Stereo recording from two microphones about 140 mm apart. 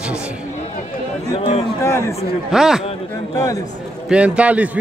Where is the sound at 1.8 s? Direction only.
20° left (ahead or behind).